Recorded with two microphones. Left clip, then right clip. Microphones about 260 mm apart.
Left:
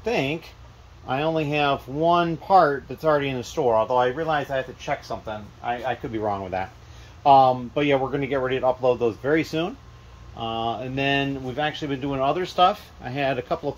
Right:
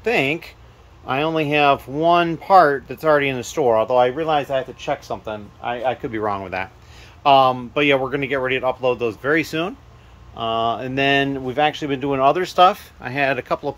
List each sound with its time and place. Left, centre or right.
0.0 s speech: centre
4.5 s speech: centre